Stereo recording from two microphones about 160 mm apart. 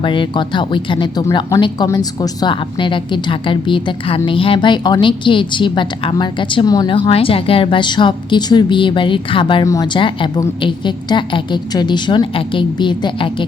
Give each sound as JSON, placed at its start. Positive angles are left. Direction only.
{"t": 0.0, "sound": "a woman's voice", "side_deg": 30}